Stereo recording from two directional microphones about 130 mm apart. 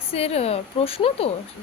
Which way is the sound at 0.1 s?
50° left (ahead or behind).